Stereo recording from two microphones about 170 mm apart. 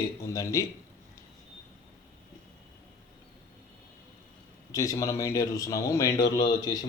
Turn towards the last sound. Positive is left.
turn(degrees=25)  # may be behind; listen again after turning